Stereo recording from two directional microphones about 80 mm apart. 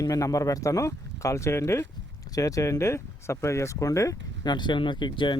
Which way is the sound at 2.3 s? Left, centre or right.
Left.